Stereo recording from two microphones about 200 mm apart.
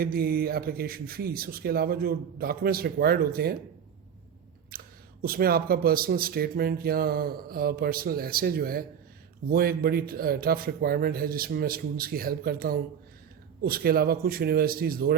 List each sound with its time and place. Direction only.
0.0 s speech: 50° right (ahead or behind)
4.7 s a sound: 50° right (ahead or behind)
5.2 s speech: 50° right (ahead or behind)